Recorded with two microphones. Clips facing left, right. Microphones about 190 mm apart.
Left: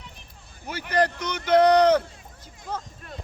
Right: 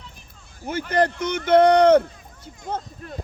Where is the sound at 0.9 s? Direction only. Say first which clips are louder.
Right 2 dB; 50° right (ahead or behind).